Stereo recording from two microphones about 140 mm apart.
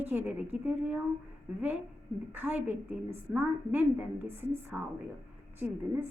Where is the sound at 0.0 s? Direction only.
15° right (ahead or behind).